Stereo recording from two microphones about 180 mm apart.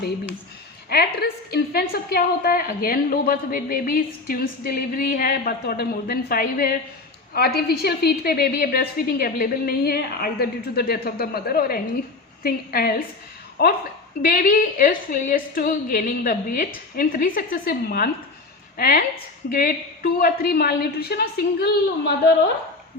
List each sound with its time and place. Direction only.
0.9 s a woman's voice: 60° left (ahead or behind)